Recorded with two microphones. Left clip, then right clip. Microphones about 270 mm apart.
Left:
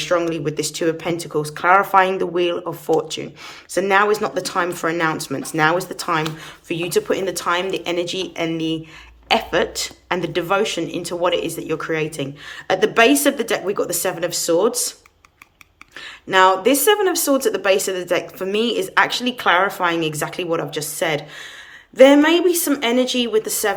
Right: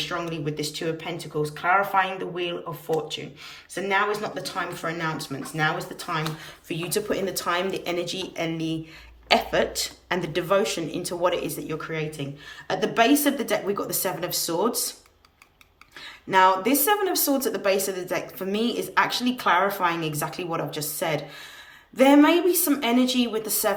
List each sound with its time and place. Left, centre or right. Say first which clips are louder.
0.0 s speech: left 9 dB; centre
3.8 s speech: left 8 dB; centre
16.3 s speech: left 5 dB; centre